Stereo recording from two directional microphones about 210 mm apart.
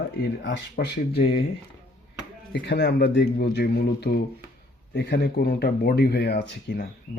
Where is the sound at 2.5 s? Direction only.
55° left (ahead or behind).